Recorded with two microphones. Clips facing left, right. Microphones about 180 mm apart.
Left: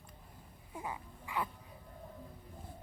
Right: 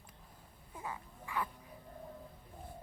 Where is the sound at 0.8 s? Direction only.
15° left (ahead or behind).